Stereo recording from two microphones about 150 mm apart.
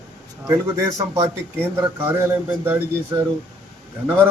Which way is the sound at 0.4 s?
20° right (ahead or behind).